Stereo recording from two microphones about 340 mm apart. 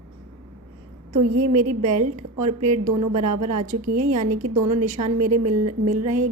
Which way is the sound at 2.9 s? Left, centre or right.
Right.